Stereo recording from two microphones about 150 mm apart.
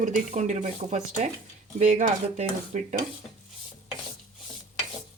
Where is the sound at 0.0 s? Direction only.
55° right (ahead or behind).